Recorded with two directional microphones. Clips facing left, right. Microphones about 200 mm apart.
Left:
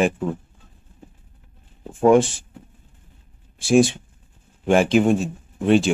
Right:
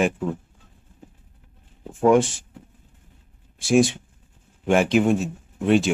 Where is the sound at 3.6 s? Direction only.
30° left (ahead or behind).